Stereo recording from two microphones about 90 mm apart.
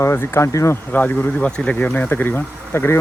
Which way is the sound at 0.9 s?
20° left (ahead or behind).